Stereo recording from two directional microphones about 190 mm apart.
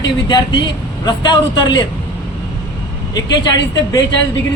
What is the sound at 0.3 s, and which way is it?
Speech, 25° left (ahead or behind).